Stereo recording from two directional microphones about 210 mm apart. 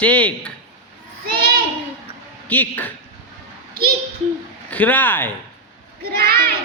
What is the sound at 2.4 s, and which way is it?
Speech, 10° left (ahead or behind).